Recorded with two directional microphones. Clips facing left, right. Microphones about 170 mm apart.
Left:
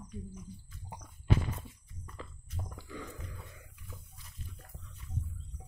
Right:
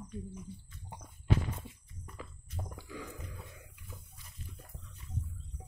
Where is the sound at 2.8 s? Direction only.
10° right (ahead or behind).